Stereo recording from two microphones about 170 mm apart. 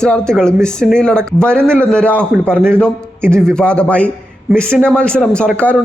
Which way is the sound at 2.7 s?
5° left (ahead or behind).